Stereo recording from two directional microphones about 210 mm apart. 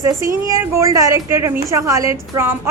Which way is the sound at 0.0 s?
15° right (ahead or behind).